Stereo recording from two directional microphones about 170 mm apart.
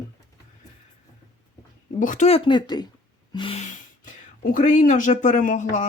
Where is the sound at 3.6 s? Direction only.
50° left (ahead or behind).